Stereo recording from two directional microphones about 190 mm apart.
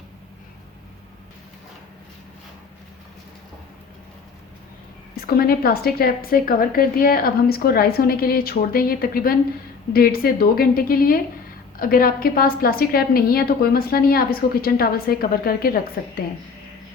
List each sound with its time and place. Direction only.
5.2 s a woman's voice: 50° left (ahead or behind)